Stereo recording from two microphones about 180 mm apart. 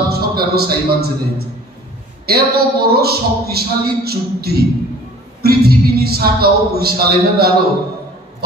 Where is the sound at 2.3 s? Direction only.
60° right (ahead or behind).